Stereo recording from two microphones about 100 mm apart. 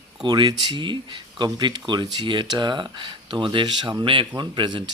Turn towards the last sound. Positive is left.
turn(degrees=-50)  # may be behind; listen again after turning